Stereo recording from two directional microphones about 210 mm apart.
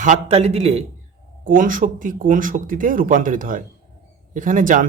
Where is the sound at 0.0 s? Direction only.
30° right (ahead or behind).